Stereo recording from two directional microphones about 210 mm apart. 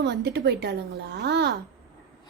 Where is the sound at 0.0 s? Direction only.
55° right (ahead or behind).